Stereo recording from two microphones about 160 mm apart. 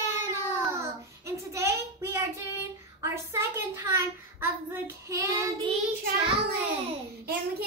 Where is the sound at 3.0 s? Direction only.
15° right (ahead or behind).